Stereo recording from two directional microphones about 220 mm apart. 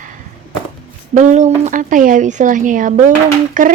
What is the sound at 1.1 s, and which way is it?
Speech, 35° right (ahead or behind).